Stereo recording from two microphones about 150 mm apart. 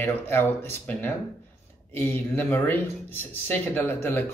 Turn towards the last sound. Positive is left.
turn(degrees=15)  # may be behind; listen again after turning